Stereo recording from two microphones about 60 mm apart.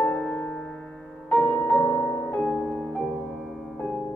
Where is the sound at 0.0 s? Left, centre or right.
Left.